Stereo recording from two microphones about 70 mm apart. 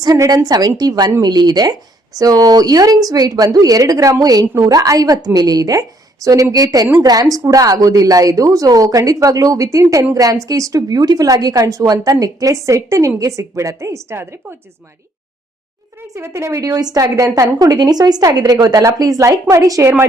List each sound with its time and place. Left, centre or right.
0.3 s speech: right
2.1 s a woman's voice: right
16.1 s a woman's voice: right
17.6 s a woman's voice: right
18.9 s a woman's voice: right